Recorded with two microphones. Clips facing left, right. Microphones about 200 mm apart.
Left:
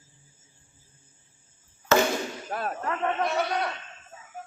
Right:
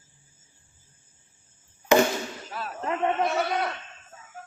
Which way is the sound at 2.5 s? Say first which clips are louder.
Left 5 dB; 50° left (ahead or behind).